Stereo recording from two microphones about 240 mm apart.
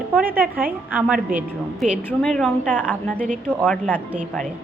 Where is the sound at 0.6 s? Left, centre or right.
Centre.